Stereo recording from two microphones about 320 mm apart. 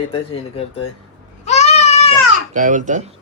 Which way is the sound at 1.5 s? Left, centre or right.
Left.